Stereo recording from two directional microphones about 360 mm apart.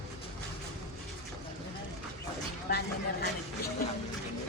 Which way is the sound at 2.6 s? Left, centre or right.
Left.